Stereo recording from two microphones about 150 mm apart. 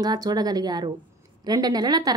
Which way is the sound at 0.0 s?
25° right (ahead or behind).